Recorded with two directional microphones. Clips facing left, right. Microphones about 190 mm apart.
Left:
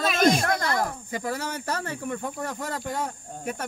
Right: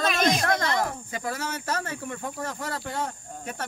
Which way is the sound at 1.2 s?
15° left (ahead or behind).